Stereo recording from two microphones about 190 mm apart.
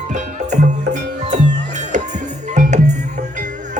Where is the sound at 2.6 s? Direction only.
40° right (ahead or behind).